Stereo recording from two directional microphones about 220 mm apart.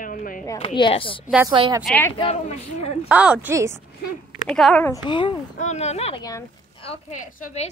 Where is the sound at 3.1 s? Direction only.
5° right (ahead or behind).